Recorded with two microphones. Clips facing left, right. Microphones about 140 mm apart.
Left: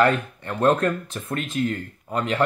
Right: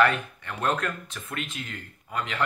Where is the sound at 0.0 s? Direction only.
35° left (ahead or behind).